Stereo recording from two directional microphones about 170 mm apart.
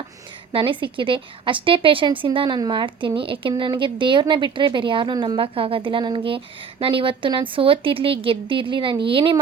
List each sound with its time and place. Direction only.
0.5 s a woman's voice: 30° right (ahead or behind)